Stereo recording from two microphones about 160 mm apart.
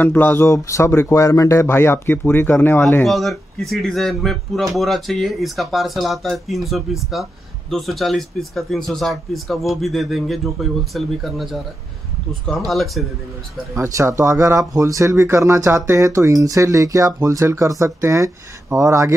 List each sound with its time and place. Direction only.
0.0 s speech: 10° left (ahead or behind)
13.7 s speech: 20° right (ahead or behind)